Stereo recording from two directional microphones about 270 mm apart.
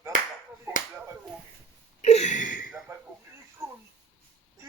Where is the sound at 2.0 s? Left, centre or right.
Left.